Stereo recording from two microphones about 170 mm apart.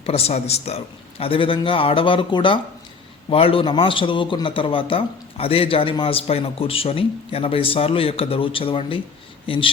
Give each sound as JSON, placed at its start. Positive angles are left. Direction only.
{"t": 0.0, "sound": "a man's voice", "side_deg": 35}